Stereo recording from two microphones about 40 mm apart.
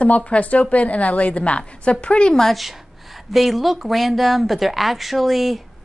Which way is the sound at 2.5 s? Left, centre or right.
Centre.